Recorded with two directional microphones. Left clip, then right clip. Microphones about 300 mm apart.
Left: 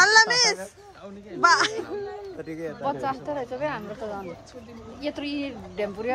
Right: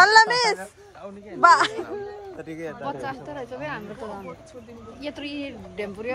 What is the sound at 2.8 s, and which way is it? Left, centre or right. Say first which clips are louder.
Speech: left 6 dB; left.